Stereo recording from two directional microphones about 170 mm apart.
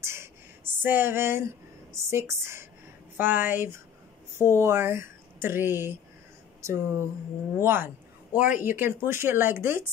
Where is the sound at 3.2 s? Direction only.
10° right (ahead or behind).